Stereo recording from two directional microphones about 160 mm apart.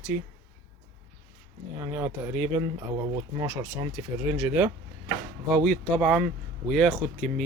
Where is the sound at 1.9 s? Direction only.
10° right (ahead or behind).